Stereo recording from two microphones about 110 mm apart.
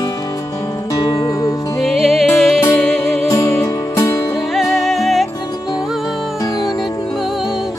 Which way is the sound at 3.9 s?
25° left (ahead or behind).